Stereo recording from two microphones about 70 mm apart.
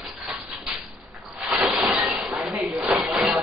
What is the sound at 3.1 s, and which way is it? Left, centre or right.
Music, centre.